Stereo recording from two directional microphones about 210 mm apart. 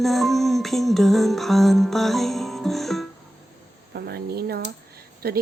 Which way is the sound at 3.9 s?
50° right (ahead or behind).